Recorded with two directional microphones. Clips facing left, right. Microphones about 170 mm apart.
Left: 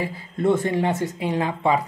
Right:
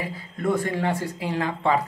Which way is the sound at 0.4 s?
25° left (ahead or behind).